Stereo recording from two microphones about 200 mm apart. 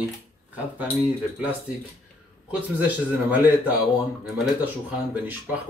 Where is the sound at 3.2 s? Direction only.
10° right (ahead or behind).